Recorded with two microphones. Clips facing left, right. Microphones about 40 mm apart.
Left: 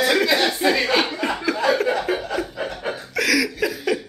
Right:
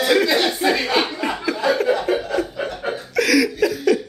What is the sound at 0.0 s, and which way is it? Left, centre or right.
Chuckle, centre.